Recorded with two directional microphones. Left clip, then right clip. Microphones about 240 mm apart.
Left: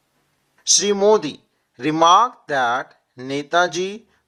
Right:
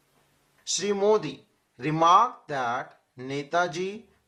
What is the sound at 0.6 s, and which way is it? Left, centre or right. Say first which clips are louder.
Speech: left 9 dB; left.